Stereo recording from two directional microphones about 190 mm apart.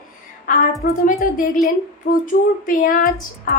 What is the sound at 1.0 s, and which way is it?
Speech, 45° left (ahead or behind).